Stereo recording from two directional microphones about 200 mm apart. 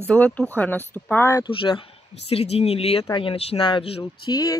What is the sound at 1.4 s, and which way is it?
Speech, 25° left (ahead or behind).